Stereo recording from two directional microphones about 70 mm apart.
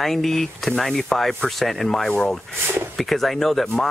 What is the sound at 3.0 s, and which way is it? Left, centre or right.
Speech, centre.